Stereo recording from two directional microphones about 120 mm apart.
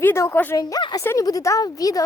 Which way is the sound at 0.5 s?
35° left (ahead or behind).